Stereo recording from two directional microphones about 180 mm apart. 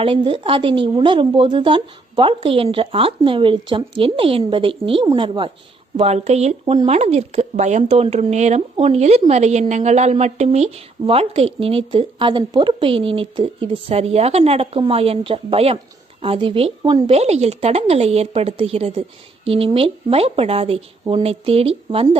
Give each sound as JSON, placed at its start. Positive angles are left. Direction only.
{"t": 0.0, "sound": "a woman's voice", "side_deg": -30}